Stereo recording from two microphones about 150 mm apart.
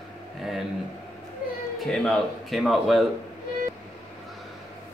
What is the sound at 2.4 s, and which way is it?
Speech, centre (ahead or behind).